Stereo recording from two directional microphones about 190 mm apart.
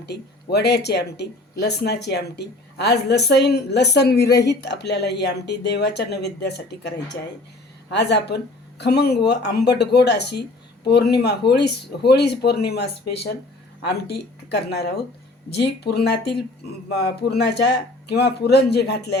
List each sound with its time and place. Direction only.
0.0 s speech: 60° left (ahead or behind)